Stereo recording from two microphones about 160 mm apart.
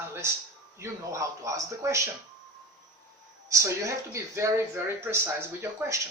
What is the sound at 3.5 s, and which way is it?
Speech, 20° right (ahead or behind).